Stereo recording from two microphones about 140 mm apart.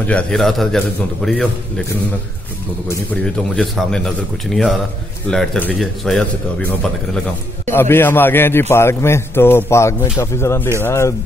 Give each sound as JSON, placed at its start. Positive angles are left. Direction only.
{"t": 0.0, "sound": "a man's voice", "side_deg": 5}
{"t": 3.5, "sound": "a man's voice", "side_deg": 5}
{"t": 5.3, "sound": "a man's voice", "side_deg": 5}
{"t": 7.7, "sound": "a man's voice", "side_deg": 15}